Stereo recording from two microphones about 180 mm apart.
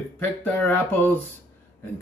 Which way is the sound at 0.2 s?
10° left (ahead or behind).